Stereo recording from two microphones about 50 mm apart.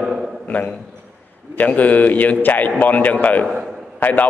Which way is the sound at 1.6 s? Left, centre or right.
Left.